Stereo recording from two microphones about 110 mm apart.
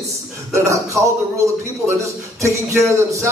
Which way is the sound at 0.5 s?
25° right (ahead or behind).